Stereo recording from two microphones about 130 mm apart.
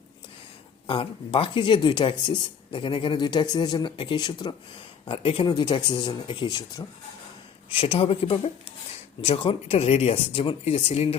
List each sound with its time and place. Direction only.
0.9 s speech: 40° left (ahead or behind)
5.0 s speech: 45° left (ahead or behind); by 6.8 s 30° left (ahead or behind)
7.7 s speech: 45° left (ahead or behind)